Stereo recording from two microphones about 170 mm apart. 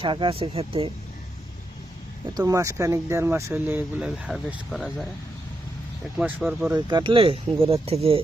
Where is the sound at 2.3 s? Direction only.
20° right (ahead or behind); by 5.1 s centre (ahead or behind).